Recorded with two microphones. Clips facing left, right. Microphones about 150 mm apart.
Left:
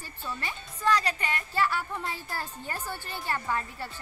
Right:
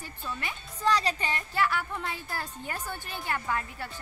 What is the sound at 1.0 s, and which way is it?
Speech, 25° right (ahead or behind).